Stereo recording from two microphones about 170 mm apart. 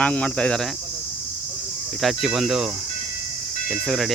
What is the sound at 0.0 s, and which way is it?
Speech, 5° left (ahead or behind).